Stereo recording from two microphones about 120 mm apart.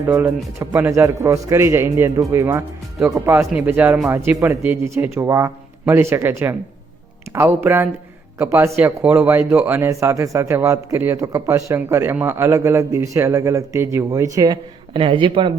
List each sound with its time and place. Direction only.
0.1 s a man's voice: 15° right (ahead or behind); by 14.6 s 30° right (ahead or behind)
14.9 s speech: 45° right (ahead or behind)